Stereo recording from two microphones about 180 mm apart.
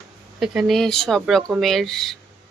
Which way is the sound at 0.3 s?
Centre (ahead or behind).